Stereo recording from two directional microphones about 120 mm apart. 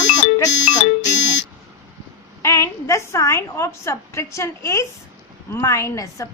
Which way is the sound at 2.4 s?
25° left (ahead or behind).